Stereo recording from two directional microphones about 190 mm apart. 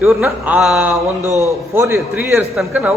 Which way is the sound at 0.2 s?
5° right (ahead or behind).